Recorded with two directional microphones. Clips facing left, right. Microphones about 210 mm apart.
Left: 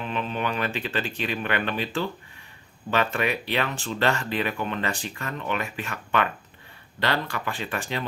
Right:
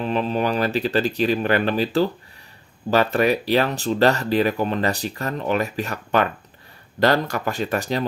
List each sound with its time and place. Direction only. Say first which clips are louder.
0.0 s speech: right 7 dB; 35° right (ahead or behind)